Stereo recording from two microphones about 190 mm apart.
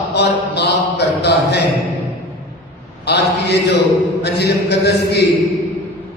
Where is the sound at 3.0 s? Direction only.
60° left (ahead or behind).